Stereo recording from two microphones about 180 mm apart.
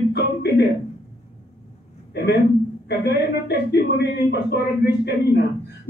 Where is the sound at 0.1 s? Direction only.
65° left (ahead or behind).